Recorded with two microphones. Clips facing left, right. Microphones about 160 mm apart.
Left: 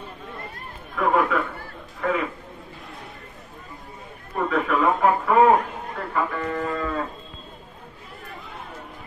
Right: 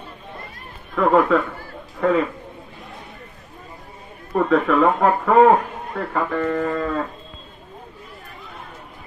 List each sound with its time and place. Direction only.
0.9 s a man's voice: 40° right (ahead or behind)
4.3 s speech: 40° right (ahead or behind)